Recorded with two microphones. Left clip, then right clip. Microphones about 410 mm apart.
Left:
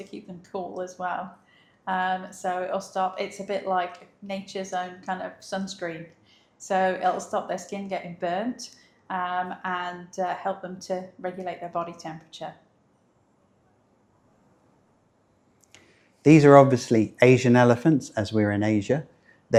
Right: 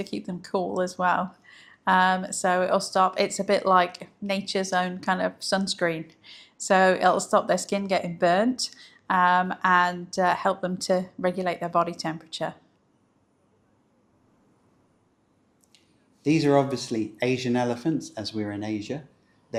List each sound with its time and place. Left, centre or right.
0.0 s speech: right
16.2 s speech: left
19.5 s speech: left